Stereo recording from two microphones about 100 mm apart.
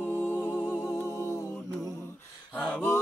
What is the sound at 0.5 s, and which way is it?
Music, 10° right (ahead or behind).